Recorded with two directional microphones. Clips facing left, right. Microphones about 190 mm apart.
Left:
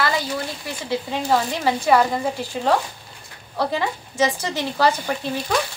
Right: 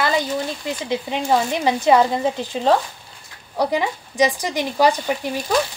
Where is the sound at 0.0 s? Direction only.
20° right (ahead or behind).